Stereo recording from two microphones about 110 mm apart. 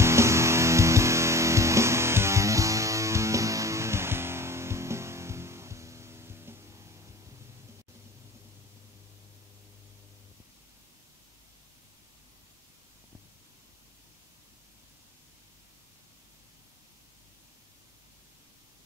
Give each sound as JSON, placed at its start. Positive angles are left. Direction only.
{"t": 0.0, "sound": "music", "side_deg": -25}